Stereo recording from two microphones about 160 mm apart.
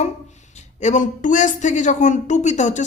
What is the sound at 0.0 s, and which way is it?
Speech, 45° left (ahead or behind).